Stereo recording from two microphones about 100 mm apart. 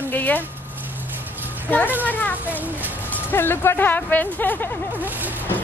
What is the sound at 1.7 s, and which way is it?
Speech, 20° left (ahead or behind).